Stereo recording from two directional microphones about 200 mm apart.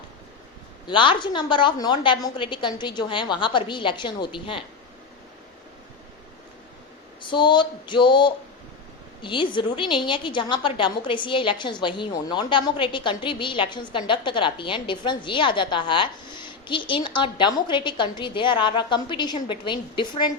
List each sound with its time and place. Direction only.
0.9 s a woman's voice: 25° left (ahead or behind)
7.2 s a woman's voice: 25° left (ahead or behind)